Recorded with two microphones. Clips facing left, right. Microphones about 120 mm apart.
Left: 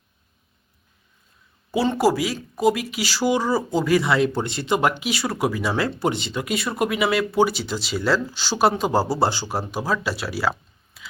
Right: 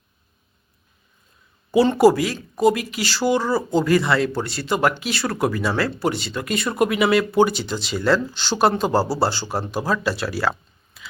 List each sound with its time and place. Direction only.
1.7 s speech: centre (ahead or behind)